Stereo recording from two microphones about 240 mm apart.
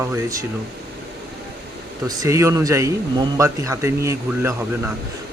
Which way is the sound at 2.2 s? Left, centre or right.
Centre.